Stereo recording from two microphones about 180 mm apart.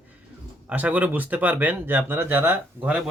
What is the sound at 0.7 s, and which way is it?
Speech, 10° right (ahead or behind).